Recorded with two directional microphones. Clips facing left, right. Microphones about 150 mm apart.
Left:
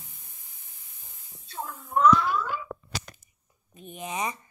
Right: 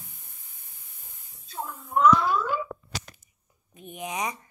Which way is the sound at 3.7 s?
15° right (ahead or behind).